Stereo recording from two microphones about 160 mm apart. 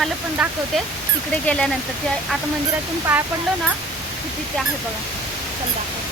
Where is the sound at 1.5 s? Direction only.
5° left (ahead or behind).